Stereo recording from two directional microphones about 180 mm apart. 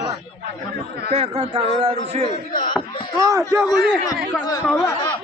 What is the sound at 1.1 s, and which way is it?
Speech, 30° right (ahead or behind).